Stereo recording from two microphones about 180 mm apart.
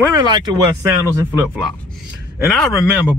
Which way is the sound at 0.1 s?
20° right (ahead or behind).